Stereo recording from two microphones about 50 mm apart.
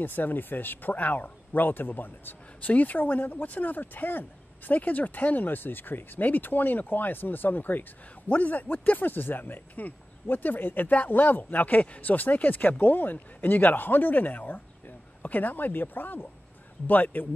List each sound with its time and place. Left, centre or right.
0.0 s speech: left